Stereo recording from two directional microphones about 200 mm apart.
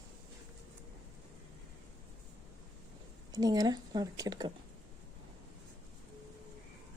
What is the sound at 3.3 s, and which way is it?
Speech, 20° right (ahead or behind).